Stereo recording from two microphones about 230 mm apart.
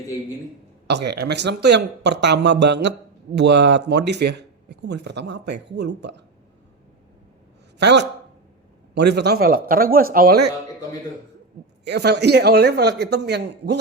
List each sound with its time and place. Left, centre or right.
0.9 s speech: right
7.8 s a man's voice: right
11.9 s speech: right